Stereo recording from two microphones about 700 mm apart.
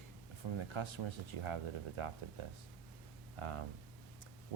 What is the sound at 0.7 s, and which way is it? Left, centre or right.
Speech, right.